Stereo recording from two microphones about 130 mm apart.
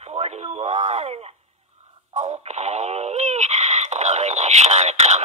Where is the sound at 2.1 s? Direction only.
65° right (ahead or behind).